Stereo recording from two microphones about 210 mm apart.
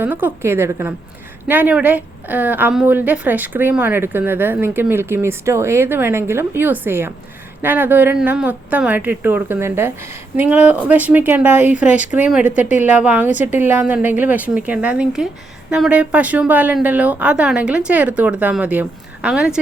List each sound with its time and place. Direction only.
0.0 s a woman's voice: 10° right (ahead or behind)
12.5 s a woman's voice: 35° left (ahead or behind)
12.8 s a woman's voice: 5° right (ahead or behind)